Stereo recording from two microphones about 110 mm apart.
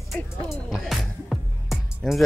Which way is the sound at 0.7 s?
Centre (ahead or behind).